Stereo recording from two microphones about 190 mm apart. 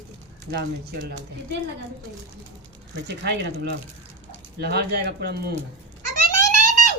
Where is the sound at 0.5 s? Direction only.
60° right (ahead or behind).